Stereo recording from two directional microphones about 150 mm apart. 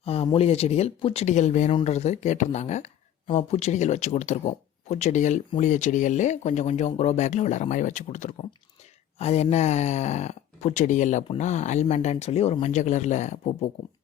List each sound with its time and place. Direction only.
0.0 s speech: 40° left (ahead or behind)